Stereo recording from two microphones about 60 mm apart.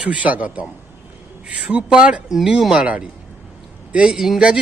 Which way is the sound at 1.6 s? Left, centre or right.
Centre.